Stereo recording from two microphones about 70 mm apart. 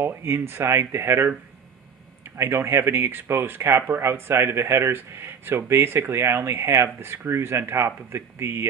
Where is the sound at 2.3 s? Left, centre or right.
Right.